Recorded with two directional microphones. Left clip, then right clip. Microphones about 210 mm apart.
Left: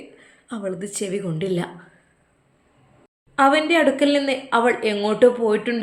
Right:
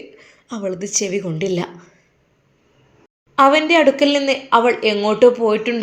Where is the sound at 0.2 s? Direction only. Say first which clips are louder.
Right 4 dB; 10° right (ahead or behind).